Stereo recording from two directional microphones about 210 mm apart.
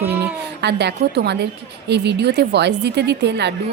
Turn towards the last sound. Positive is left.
turn(degrees=-55)  # may be behind; listen again after turning